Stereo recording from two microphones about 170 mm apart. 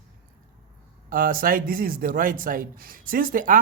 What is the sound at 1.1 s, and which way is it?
Speech, 55° right (ahead or behind).